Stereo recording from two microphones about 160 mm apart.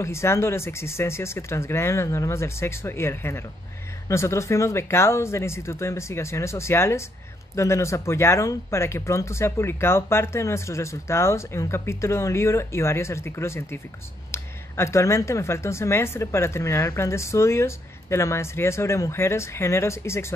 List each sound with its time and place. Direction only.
0.0 s speech: 15° left (ahead or behind)